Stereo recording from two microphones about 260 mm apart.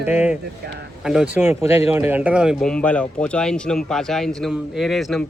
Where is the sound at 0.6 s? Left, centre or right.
Right.